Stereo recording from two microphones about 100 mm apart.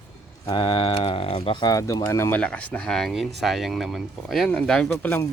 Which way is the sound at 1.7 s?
35° left (ahead or behind).